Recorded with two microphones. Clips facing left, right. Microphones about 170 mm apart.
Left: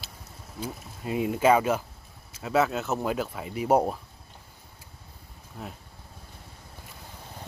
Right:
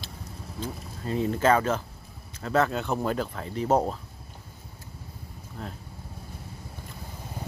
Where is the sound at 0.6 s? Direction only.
10° left (ahead or behind).